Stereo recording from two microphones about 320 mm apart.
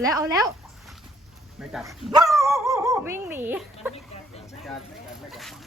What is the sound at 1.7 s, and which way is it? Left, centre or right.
Speech, centre.